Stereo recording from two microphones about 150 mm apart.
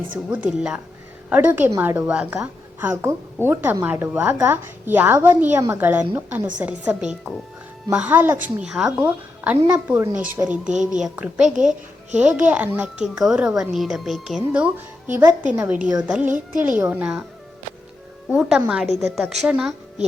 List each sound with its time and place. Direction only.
0.1 s a woman's voice: 10° right (ahead or behind)
2.9 s a woman's voice: 20° right (ahead or behind)
18.3 s a child's voice: 5° right (ahead or behind)